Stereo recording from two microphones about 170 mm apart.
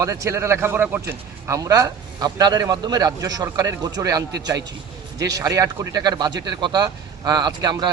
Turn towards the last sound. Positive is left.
turn(degrees=-25)  # may be behind; listen again after turning